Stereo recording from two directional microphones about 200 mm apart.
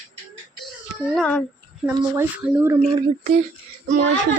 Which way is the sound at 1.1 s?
5° left (ahead or behind).